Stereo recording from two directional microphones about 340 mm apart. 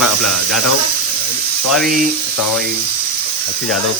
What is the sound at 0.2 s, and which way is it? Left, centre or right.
Speech, left.